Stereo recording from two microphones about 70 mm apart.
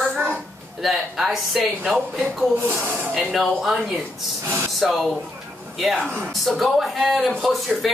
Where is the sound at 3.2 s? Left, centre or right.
Centre.